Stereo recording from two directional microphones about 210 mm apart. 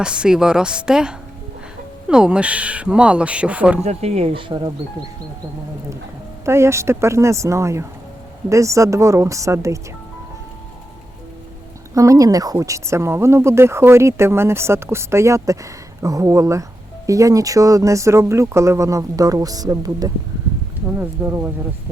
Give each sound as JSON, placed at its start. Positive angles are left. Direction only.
{"t": 0.0, "sound": "speech", "side_deg": -5}
{"t": 3.8, "sound": "speech", "side_deg": -30}
{"t": 6.4, "sound": "speech", "side_deg": -15}
{"t": 11.9, "sound": "speech", "side_deg": -15}